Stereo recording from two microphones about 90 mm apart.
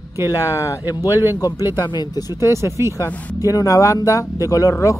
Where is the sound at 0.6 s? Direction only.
35° left (ahead or behind).